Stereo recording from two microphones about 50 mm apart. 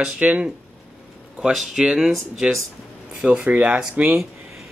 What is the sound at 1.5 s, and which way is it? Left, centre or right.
Speech, centre.